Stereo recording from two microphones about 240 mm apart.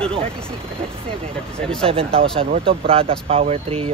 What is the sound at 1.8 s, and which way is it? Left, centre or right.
Speech, right.